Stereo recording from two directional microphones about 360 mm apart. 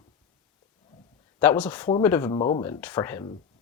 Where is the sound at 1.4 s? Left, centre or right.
Centre.